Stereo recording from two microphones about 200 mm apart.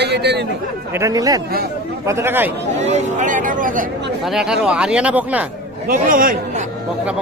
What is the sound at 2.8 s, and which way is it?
Speech, 35° right (ahead or behind).